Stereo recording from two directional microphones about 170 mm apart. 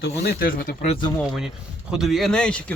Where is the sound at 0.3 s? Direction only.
60° left (ahead or behind).